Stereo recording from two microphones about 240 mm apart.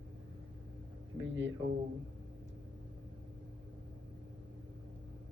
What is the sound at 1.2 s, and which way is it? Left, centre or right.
Speech, right.